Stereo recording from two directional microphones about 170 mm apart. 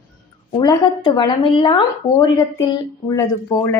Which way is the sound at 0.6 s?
25° left (ahead or behind).